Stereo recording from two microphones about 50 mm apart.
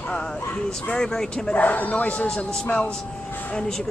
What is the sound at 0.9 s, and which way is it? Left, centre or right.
Speech, centre.